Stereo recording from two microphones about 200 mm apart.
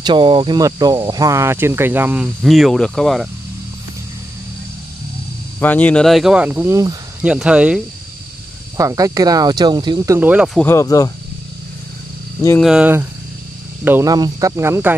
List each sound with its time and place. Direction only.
0.0 s speech: 25° right (ahead or behind); by 3.3 s centre (ahead or behind)
5.6 s speech: 10° left (ahead or behind); by 7.0 s 15° right (ahead or behind)
7.2 s speech: 5° right (ahead or behind)
8.7 s speech: 15° right (ahead or behind)
10.6 s speech: 15° left (ahead or behind)
12.6 s speech: 5° right (ahead or behind)